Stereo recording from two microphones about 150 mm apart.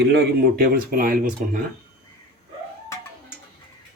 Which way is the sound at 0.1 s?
85° right.